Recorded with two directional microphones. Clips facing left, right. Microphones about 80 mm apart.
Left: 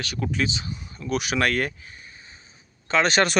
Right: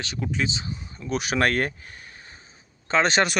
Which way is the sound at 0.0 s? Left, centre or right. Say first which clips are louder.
Left 1 dB; right.